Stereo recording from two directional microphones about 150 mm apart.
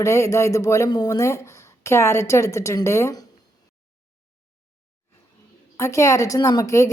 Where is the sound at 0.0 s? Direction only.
20° left (ahead or behind).